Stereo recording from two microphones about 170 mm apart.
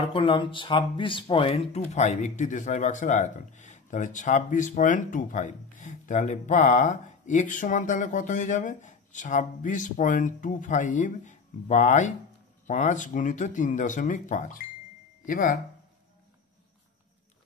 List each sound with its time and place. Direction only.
0.1 s speech: 30° left (ahead or behind); by 15.6 s 55° left (ahead or behind)